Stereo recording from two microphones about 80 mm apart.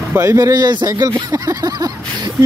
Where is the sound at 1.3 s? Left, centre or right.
Right.